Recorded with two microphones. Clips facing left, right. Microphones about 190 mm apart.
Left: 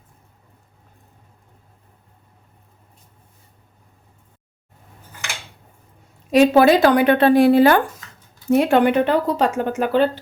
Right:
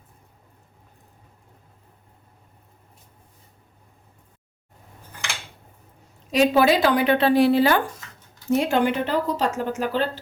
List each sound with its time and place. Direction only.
6.3 s a woman's voice: 50° left (ahead or behind)